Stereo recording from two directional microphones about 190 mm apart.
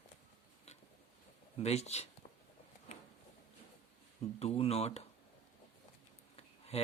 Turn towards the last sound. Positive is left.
turn(degrees=35)  # may be behind; listen again after turning